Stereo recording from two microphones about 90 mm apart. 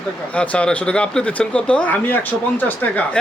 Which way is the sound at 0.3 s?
15° left (ahead or behind).